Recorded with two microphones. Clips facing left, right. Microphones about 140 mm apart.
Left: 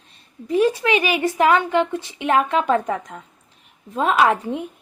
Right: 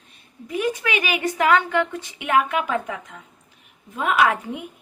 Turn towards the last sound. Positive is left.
turn(degrees=30)  # may be behind; listen again after turning